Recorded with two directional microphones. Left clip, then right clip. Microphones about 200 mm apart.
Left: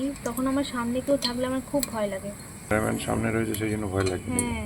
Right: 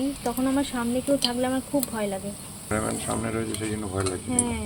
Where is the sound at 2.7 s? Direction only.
20° left (ahead or behind).